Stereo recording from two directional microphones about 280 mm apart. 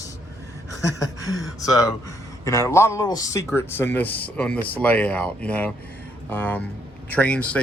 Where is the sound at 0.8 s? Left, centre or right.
Centre.